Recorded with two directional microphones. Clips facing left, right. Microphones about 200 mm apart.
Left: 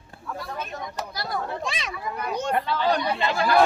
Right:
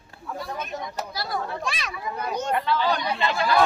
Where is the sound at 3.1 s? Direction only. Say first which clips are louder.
Left 1 dB; 45° left (ahead or behind).